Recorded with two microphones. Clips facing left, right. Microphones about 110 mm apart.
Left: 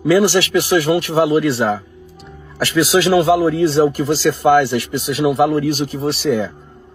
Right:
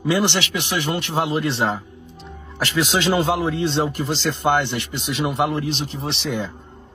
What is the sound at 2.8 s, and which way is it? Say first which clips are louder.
Speech: left 7 dB; 40° left (ahead or behind).